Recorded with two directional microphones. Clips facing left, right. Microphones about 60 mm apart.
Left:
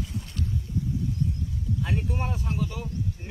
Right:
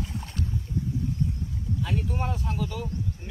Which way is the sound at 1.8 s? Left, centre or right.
Left.